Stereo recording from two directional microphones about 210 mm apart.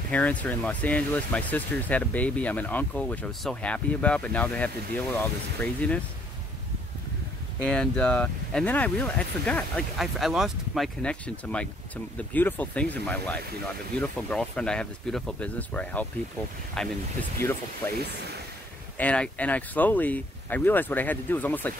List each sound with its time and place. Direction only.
0.1 s speech: 5° left (ahead or behind)
7.7 s speech: 5° left (ahead or behind)